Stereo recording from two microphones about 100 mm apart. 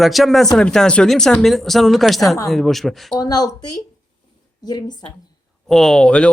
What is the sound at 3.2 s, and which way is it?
Speech, 40° left (ahead or behind).